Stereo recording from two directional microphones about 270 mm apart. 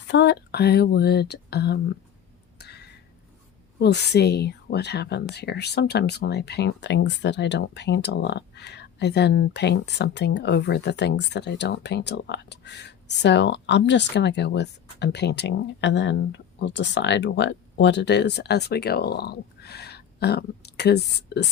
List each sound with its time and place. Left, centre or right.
0.1 s speech: left
2.6 s a sound: left
3.8 s speech: left